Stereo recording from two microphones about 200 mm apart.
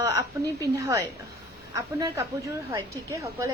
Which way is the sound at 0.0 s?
15° right (ahead or behind).